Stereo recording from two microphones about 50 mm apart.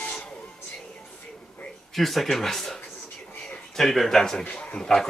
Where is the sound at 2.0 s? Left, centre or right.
Centre.